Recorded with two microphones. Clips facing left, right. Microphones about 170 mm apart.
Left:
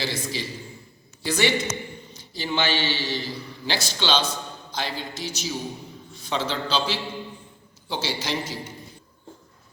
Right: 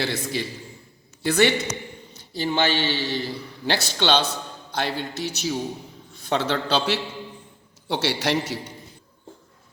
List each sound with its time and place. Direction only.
0.0 s a man's voice: 55° right (ahead or behind)